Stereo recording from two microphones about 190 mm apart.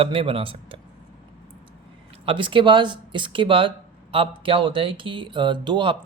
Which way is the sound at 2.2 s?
25° right (ahead or behind).